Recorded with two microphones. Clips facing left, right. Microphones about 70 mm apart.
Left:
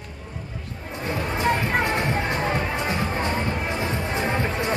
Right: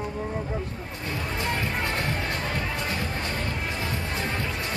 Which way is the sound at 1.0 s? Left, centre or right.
Left.